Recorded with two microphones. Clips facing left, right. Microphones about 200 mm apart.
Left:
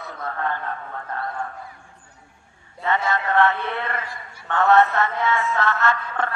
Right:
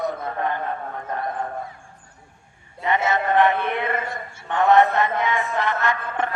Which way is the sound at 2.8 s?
20° right (ahead or behind).